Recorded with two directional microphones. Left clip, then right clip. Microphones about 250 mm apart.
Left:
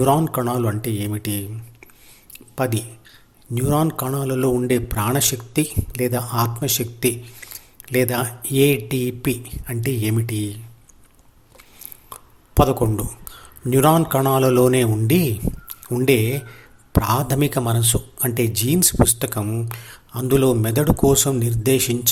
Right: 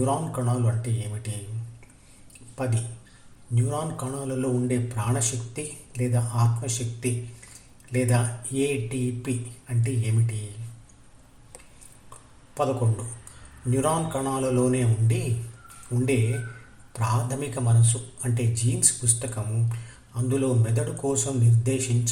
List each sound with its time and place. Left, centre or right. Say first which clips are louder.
0.0 s a man's voice: left 9 dB; left
3.5 s a man's voice: left 10 dB; left
12.6 s a man's voice: left 8 dB; left